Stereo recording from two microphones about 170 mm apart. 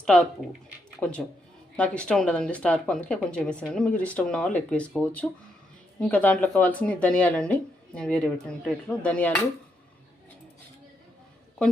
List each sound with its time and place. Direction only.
0.0 s a woman's voice: 5° left (ahead or behind)